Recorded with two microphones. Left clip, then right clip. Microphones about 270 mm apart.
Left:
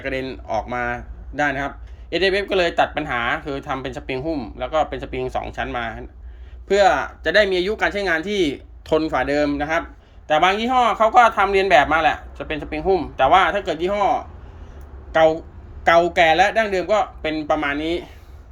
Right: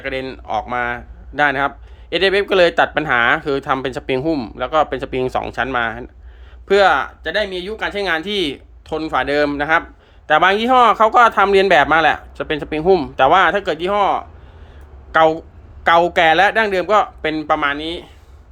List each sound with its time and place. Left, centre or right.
0.0 s speech: centre
6.7 s speech: centre